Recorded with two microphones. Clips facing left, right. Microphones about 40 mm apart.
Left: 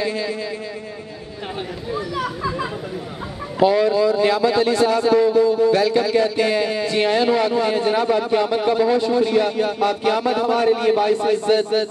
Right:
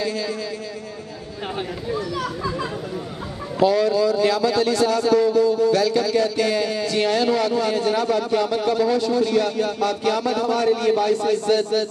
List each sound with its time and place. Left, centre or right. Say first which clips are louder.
0.0 s a sound: left 2 dB; left
2.0 s a man's voice: left 3 dB; centre
3.5 s a man's voice: left 2 dB; left